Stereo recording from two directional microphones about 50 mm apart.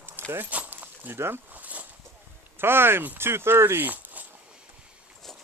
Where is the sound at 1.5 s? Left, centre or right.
Right.